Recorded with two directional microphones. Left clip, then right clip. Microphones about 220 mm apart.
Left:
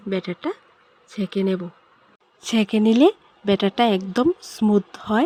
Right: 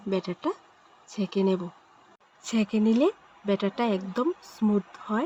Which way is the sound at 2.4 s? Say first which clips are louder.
Left 6 dB; 55° left (ahead or behind).